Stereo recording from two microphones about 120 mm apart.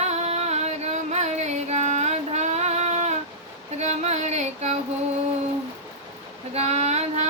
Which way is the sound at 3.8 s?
70° right (ahead or behind).